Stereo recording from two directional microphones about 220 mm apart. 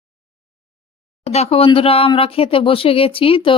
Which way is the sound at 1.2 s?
30° left (ahead or behind).